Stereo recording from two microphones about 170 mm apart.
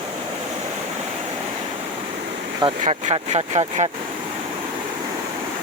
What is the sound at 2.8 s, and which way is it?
Speech, 40° right (ahead or behind).